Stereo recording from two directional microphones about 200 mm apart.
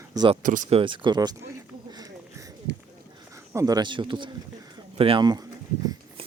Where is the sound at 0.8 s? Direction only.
25° right (ahead or behind).